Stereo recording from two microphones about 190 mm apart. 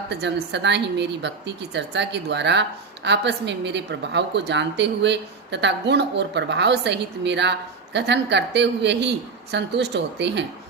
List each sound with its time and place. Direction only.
0.1 s a woman's voice: 65° right (ahead or behind)